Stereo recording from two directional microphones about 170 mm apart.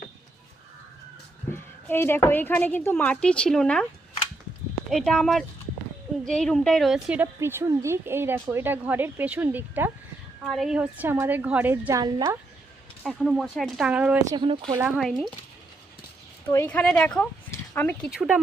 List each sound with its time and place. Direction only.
1.5 s speech: 15° left (ahead or behind)
4.9 s speech: 5° left (ahead or behind)
7.3 s speech: 15° right (ahead or behind)
10.4 s speech: centre (ahead or behind); by 12.4 s 15° right (ahead or behind)
13.0 s speech: centre (ahead or behind)
14.3 s speech: 25° right (ahead or behind)
14.9 s speech: centre (ahead or behind)
16.5 s speech: 10° left (ahead or behind)
18.1 s speech: 5° right (ahead or behind)